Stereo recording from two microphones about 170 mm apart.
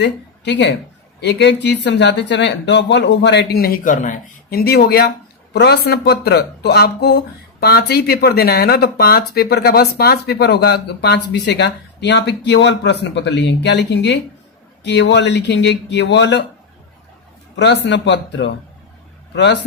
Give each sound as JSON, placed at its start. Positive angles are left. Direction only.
{"t": 0.0, "sound": "speech", "side_deg": 90}
{"t": 17.6, "sound": "speech", "side_deg": 90}